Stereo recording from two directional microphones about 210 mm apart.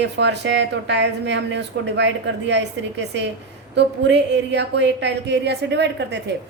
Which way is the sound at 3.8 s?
55° right (ahead or behind).